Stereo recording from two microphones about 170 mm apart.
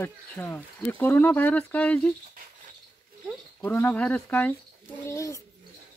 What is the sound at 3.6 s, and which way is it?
Speech, 10° left (ahead or behind).